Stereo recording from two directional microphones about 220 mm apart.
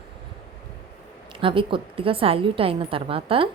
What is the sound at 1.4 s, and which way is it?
A woman's voice, 25° right (ahead or behind).